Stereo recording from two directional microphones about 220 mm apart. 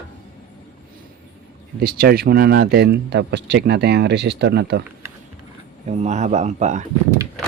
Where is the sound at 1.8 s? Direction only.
45° right (ahead or behind).